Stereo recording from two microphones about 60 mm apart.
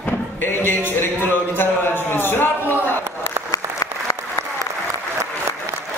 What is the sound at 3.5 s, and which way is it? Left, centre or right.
Applause, left.